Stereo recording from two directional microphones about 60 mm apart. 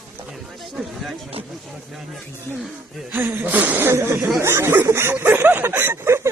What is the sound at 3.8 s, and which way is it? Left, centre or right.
Speech, right.